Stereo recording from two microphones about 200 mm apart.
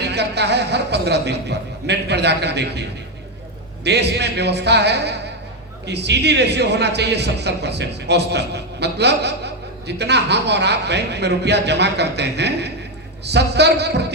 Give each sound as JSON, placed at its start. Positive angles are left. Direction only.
{"t": 0.0, "sound": "a man's voice", "side_deg": -55}
{"t": 3.8, "sound": "a man's voice", "side_deg": -55}